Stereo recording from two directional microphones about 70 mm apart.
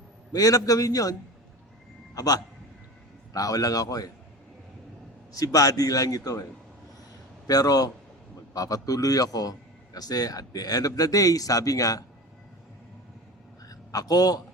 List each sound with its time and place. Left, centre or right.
0.3 s a man's voice: left
2.1 s a man's voice: left
5.3 s a man's voice: left
7.4 s a man's voice: left
13.7 s a sound: left